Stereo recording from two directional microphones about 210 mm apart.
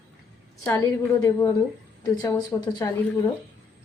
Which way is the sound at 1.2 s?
15° left (ahead or behind).